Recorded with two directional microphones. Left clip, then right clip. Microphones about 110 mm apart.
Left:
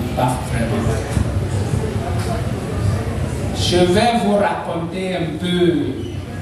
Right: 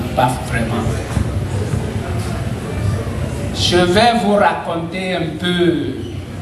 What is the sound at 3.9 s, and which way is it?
Speech, 20° right (ahead or behind).